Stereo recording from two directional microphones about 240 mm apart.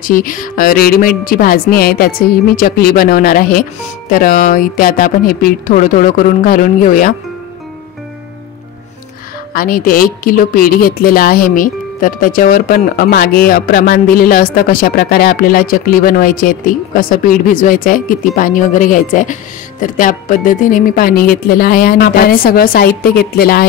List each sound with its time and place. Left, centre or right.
0.0 s a woman's voice: left
9.5 s a woman's voice: left